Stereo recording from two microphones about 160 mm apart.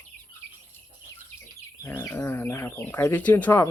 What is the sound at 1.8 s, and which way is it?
Bird, 15° left (ahead or behind).